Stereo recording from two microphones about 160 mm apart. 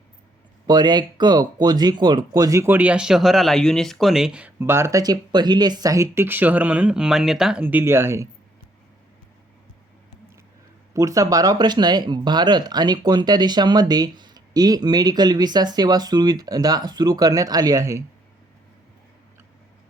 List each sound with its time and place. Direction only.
0.7 s speech: 25° right (ahead or behind)
10.9 s speech: 20° right (ahead or behind)